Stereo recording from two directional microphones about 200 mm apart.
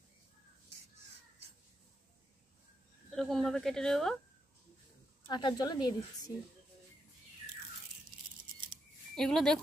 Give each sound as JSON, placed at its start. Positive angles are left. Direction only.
{"t": 3.1, "sound": "a woman's voice", "side_deg": 0}
{"t": 5.3, "sound": "a woman's voice", "side_deg": 20}
{"t": 9.1, "sound": "speech", "side_deg": 5}